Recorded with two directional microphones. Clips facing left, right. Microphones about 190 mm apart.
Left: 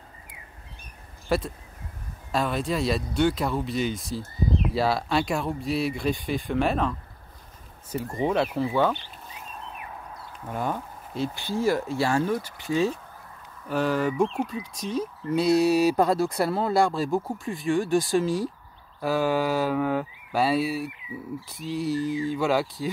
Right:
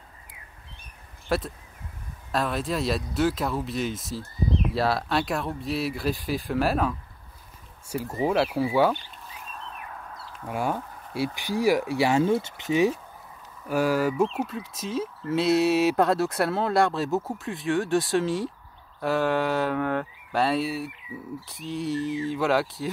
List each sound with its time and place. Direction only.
1.3 s speech: centre (ahead or behind)
10.2 s speech: centre (ahead or behind)
12.4 s speech: 25° right (ahead or behind); by 22.8 s centre (ahead or behind)